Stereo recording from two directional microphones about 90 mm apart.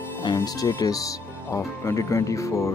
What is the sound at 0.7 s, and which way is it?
Speech, 40° left (ahead or behind).